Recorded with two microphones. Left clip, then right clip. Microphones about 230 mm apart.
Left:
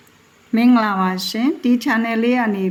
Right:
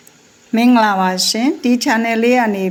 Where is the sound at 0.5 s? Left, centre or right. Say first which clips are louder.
Right 4 dB; centre.